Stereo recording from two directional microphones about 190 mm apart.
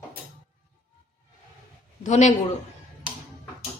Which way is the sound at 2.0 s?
40° left (ahead or behind).